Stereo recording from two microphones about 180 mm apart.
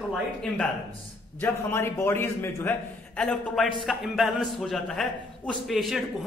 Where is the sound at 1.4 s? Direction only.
15° left (ahead or behind).